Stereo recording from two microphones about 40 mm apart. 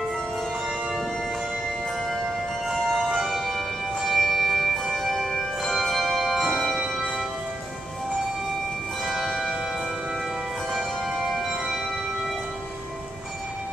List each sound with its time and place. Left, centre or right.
2.6 s music: centre
9.0 s church bell: centre